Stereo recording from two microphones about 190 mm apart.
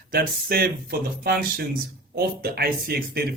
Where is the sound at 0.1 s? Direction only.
50° right (ahead or behind).